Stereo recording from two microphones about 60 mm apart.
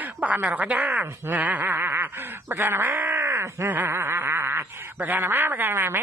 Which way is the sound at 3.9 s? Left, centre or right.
Right.